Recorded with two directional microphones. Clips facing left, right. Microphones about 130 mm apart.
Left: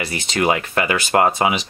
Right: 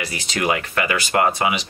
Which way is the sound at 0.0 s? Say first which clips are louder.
Left 4 dB; 25° left (ahead or behind).